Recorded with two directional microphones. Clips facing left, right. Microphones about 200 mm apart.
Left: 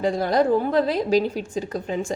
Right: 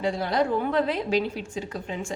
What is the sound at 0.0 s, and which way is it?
A woman's voice, 45° left (ahead or behind).